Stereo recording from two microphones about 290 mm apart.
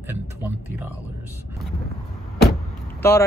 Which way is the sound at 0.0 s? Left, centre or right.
Centre.